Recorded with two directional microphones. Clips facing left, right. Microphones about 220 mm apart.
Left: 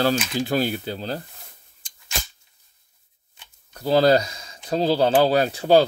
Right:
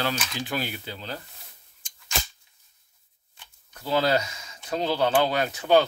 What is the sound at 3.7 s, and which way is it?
Speech, 35° left (ahead or behind).